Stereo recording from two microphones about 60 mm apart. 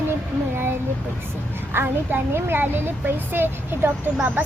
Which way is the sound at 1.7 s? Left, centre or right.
Right.